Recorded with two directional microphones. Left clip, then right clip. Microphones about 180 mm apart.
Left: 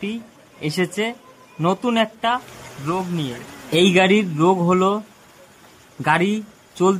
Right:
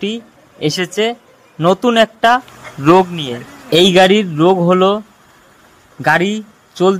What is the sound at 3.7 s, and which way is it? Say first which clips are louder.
A man's voice: right 7 dB; 25° right (ahead or behind).